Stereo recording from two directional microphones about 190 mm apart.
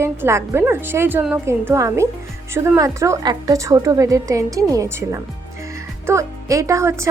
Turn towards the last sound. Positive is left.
turn(degrees=-15)  # may be behind; listen again after turning